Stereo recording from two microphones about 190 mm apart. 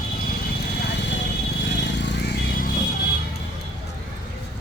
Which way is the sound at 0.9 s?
70° left (ahead or behind).